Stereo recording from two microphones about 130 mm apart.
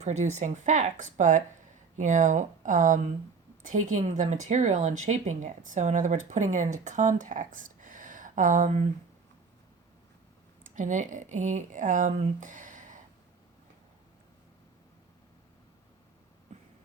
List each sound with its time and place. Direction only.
0.0 s speech: 60° right (ahead or behind); by 8.9 s 75° right (ahead or behind)
10.8 s speech: 75° right (ahead or behind)